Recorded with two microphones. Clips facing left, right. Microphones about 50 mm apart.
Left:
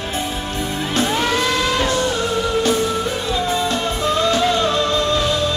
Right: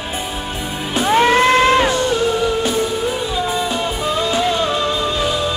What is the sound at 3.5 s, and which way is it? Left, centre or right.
Music, centre.